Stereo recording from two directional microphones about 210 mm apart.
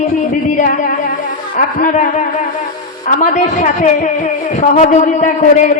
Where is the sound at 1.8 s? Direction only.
40° left (ahead or behind).